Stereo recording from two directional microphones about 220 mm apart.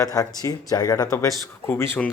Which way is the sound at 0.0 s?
15° left (ahead or behind).